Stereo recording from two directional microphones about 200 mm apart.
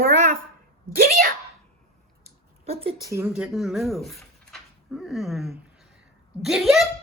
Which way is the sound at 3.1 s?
10° right (ahead or behind).